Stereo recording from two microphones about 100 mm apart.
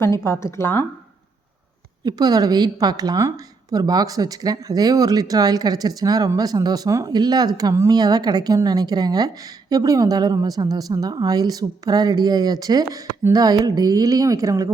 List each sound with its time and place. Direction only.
0.0 s speech: 30° left (ahead or behind)
2.0 s a woman's voice: 40° right (ahead or behind)